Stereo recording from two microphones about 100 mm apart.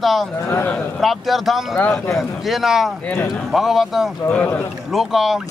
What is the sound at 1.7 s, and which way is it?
Speech, 10° left (ahead or behind).